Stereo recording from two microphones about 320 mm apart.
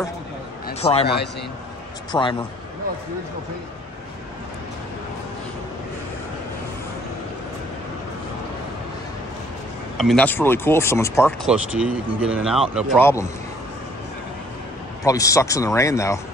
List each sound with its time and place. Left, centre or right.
0.7 s a man's voice: centre
2.1 s speech: centre
9.9 s speech: centre
15.0 s speech: centre